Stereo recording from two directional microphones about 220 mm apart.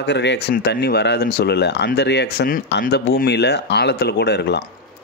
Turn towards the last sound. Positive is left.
turn(degrees=50)  # may be behind; listen again after turning